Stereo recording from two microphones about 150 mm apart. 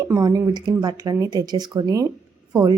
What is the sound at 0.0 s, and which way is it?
Speech, 25° right (ahead or behind).